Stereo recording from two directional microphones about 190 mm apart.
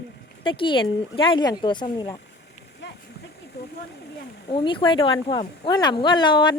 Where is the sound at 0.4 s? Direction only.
25° left (ahead or behind).